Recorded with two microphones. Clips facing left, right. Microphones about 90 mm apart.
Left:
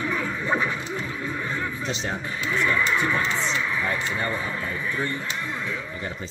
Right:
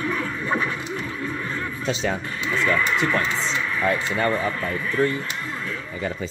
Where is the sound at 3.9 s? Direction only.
75° right (ahead or behind).